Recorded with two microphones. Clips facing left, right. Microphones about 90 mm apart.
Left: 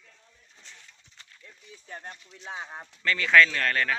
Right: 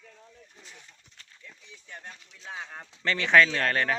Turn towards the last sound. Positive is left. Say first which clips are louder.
# right 1 dB
turn(degrees=-25)  # may be behind; listen again after turning